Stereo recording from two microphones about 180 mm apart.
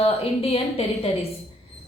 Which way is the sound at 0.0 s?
35° left (ahead or behind).